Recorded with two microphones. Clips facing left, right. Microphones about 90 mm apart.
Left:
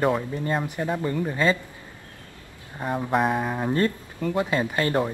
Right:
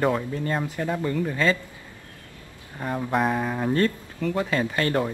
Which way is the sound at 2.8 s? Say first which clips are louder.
Left 1 dB; 10° left (ahead or behind).